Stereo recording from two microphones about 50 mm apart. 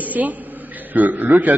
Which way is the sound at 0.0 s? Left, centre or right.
Right.